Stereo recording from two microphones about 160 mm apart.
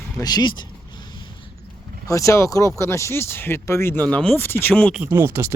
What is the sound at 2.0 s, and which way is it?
Speech, 20° left (ahead or behind).